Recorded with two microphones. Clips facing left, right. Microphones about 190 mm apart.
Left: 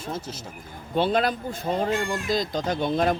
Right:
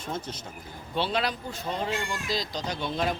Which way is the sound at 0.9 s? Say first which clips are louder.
Left 6 dB; 50° left (ahead or behind).